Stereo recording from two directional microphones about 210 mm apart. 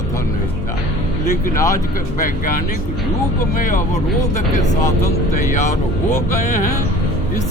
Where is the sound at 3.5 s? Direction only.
40° left (ahead or behind).